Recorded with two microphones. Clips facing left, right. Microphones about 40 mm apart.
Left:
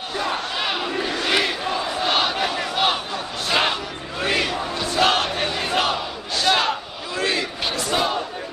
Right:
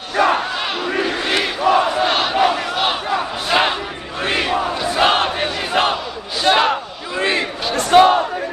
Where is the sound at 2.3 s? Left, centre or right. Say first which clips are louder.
Right 8 dB; centre.